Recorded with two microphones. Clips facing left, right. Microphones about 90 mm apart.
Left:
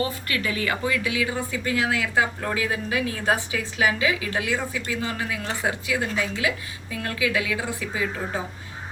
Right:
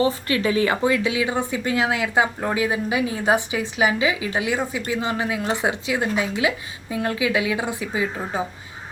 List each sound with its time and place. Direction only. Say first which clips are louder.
0.0 s speech: right 6 dB; 25° right (ahead or behind)